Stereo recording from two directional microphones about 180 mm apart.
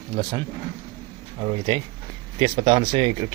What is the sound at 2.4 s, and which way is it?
Speech, 25° right (ahead or behind).